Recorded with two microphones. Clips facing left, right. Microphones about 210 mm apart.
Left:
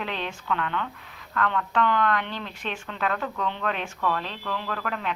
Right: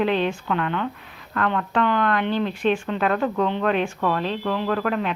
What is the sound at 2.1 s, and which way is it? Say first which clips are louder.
Speech: right 8 dB; 60° right (ahead or behind).